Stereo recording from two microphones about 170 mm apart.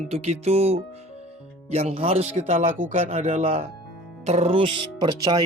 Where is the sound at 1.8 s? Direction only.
35° right (ahead or behind).